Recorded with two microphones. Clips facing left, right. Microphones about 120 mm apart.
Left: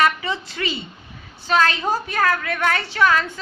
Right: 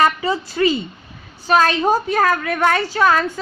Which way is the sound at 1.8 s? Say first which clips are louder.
Right 5 dB; 20° right (ahead or behind).